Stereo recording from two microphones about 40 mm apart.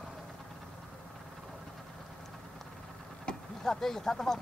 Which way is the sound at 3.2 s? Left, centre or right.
Centre.